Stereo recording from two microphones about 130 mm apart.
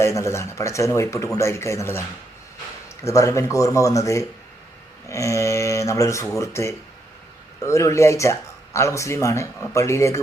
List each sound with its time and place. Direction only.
0.0 s speech: 20° left (ahead or behind)